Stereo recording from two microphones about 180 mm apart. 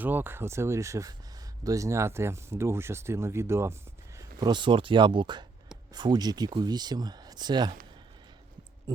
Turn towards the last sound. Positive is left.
turn(degrees=-25)  # may be behind; listen again after turning